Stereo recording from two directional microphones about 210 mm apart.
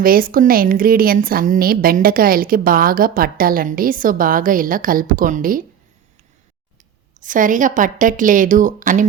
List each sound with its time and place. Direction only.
0.0 s a woman's voice: 45° right (ahead or behind)
7.2 s a woman's voice: 40° right (ahead or behind)